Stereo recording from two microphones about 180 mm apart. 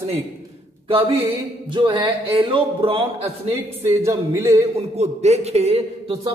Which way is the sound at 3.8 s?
15° right (ahead or behind).